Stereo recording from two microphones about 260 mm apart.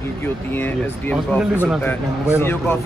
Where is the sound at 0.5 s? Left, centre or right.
Centre.